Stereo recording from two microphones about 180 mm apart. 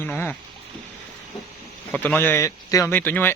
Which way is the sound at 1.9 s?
10° left (ahead or behind).